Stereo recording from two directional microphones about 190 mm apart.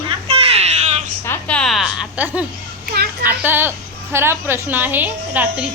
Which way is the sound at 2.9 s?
55° right (ahead or behind).